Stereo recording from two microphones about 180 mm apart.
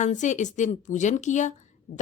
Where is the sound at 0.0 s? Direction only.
40° left (ahead or behind).